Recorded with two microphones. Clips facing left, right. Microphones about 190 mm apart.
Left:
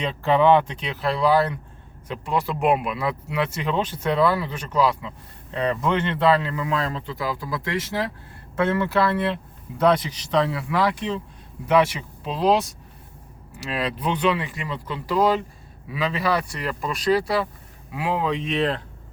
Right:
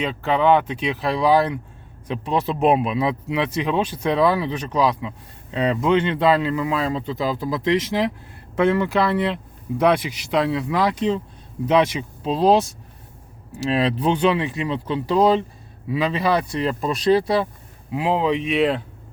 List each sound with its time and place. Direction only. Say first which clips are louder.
0.0 s speech: left 1 dB; 5° right (ahead or behind)